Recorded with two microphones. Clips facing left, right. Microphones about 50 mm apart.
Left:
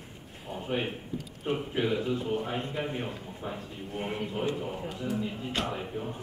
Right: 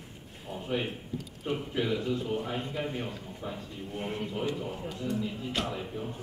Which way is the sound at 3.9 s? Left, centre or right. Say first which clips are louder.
Left 1 dB; centre.